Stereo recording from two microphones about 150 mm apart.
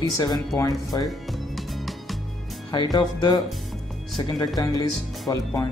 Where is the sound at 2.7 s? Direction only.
30° left (ahead or behind).